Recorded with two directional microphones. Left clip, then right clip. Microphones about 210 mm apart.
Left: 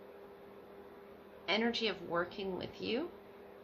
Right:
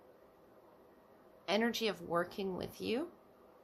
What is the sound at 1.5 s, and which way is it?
Speech, 55° right (ahead or behind).